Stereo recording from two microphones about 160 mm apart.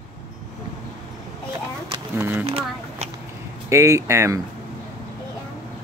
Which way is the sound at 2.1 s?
15° right (ahead or behind).